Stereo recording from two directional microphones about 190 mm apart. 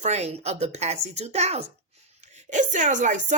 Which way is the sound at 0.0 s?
35° right (ahead or behind).